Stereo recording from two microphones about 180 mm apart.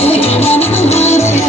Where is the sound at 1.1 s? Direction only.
15° left (ahead or behind).